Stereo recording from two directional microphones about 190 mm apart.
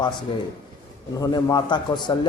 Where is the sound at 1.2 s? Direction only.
20° left (ahead or behind).